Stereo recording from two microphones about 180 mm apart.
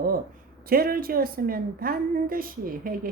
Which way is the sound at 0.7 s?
55° right (ahead or behind).